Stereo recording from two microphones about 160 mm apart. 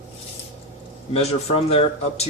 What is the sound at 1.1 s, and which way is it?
Speech, 40° left (ahead or behind).